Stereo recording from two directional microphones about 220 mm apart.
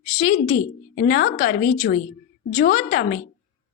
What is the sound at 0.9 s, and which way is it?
Speech, 45° left (ahead or behind).